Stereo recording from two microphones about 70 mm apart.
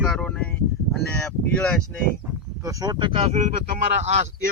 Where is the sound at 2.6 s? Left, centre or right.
Right.